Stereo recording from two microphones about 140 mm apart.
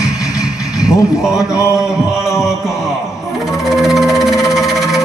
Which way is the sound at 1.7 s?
5° right (ahead or behind).